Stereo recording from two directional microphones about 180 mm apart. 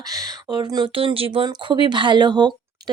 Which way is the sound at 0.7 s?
25° right (ahead or behind).